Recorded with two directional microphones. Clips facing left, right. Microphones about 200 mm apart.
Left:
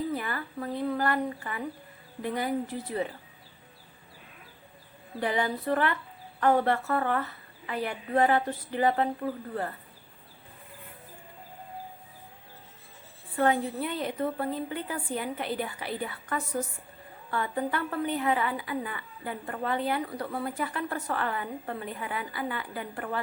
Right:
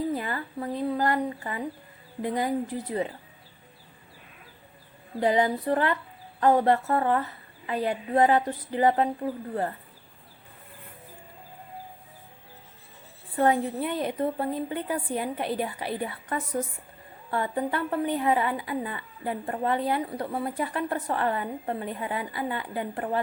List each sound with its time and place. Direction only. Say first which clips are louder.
0.1 s a woman's voice: right 2 dB; 20° right (ahead or behind)
5.2 s a woman's voice: right 5 dB; 20° right (ahead or behind)
13.3 s a woman's voice: right 2 dB; 25° right (ahead or behind)